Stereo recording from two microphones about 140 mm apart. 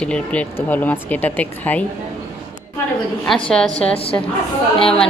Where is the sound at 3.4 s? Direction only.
5° left (ahead or behind).